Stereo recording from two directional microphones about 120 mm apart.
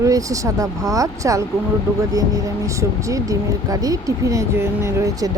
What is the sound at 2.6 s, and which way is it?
Speech, 25° right (ahead or behind).